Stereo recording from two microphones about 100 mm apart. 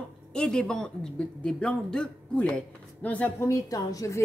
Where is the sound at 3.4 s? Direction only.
30° left (ahead or behind).